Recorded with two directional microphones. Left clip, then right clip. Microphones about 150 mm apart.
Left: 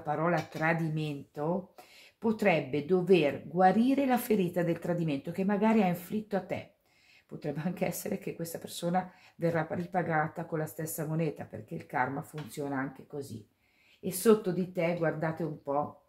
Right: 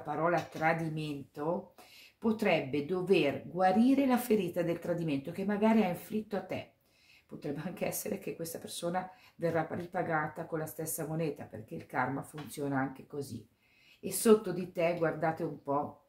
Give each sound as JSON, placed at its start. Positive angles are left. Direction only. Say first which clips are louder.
{"t": 0.0, "sound": "a woman's voice", "louder": "left 1 dB", "side_deg": 30}
{"t": 12.4, "sound": "speech", "louder": "right 1 dB", "side_deg": 25}
{"t": 14.0, "sound": "speech", "louder": "left 1 dB", "side_deg": 20}